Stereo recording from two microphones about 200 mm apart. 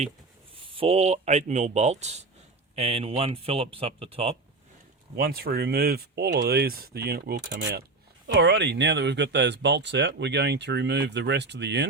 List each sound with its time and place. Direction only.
0.5 s speech: 25° right (ahead or behind)
5.1 s speech: 50° right (ahead or behind)